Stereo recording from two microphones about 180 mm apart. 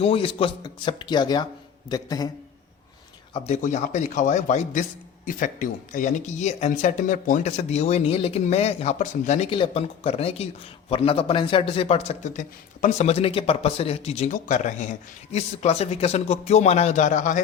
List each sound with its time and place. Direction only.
0.0 s speech: 30° left (ahead or behind)
3.3 s a man's voice: 40° left (ahead or behind)